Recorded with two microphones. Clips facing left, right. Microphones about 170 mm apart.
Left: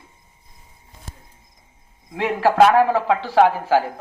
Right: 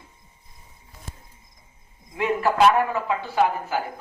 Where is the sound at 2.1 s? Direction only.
90° left.